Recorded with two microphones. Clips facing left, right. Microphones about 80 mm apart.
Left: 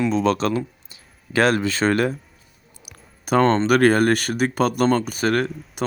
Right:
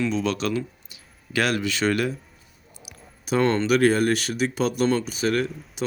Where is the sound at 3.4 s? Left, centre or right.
Left.